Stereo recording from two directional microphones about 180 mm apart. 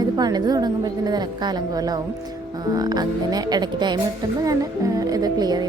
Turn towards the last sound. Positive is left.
turn(degrees=-20)  # may be behind; listen again after turning